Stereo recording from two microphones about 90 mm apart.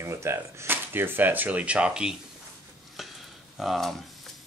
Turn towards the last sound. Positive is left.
turn(degrees=0)  # may be behind; listen again after turning